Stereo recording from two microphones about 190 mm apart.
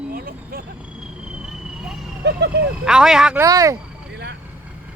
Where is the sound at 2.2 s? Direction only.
65° right (ahead or behind).